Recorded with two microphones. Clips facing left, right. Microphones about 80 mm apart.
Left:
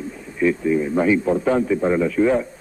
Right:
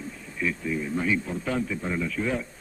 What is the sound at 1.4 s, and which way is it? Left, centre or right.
Speech, left.